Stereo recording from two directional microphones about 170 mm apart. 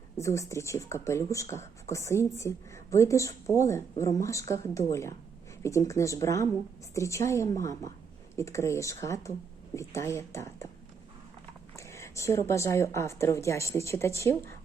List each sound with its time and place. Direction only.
0.2 s speech: 15° left (ahead or behind)
11.8 s speech: 15° left (ahead or behind)